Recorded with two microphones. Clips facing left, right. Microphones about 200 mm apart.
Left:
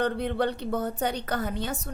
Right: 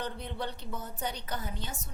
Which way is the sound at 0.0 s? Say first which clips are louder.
Left 11 dB; 65° left (ahead or behind).